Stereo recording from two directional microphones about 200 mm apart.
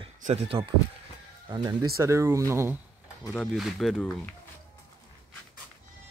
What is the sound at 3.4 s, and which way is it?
Speech, centre (ahead or behind).